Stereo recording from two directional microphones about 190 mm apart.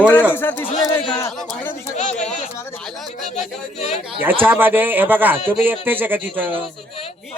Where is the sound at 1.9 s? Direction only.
40° left (ahead or behind).